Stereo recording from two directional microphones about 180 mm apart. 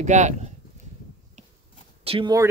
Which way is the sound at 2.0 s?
30° right (ahead or behind).